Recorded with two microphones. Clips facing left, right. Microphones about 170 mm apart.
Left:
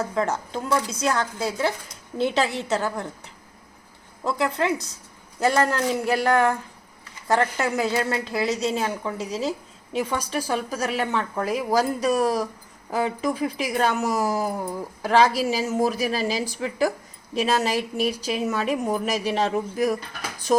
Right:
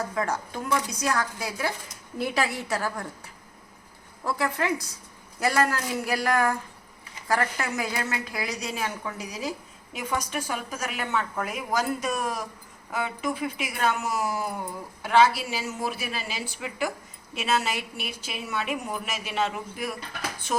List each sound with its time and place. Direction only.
0.1 s a woman's voice: 20° left (ahead or behind)
4.2 s a woman's voice: 20° left (ahead or behind); by 20.6 s 35° left (ahead or behind)